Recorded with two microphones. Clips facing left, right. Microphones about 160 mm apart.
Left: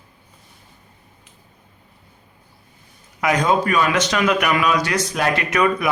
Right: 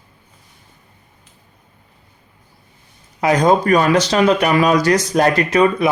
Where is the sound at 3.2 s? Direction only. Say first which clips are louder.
Right 4 dB; 35° right (ahead or behind).